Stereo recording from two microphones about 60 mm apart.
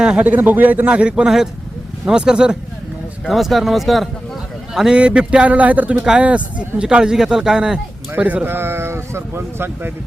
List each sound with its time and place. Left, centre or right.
0.0 s a man's voice: centre
0.3 s speech: right
0.9 s speech: centre
3.2 s speech: centre
4.9 s speech: centre
8.1 s speech: right
8.4 s speech: right